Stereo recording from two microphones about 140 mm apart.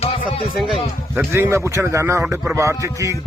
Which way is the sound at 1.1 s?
20° right (ahead or behind).